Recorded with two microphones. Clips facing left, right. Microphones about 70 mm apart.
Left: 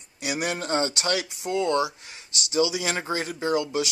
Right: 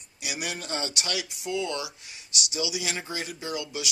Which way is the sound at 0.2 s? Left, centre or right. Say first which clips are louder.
Left 6 dB; left.